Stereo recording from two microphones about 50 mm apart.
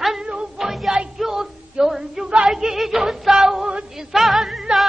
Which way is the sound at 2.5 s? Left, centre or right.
Centre.